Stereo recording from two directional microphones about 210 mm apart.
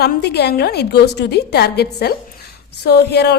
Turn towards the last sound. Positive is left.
turn(degrees=50)  # may be behind; listen again after turning